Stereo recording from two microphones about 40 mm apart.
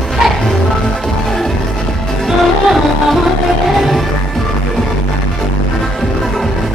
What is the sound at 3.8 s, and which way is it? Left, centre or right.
Music, centre.